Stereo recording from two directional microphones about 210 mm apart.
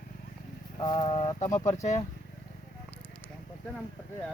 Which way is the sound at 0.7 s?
20° left (ahead or behind).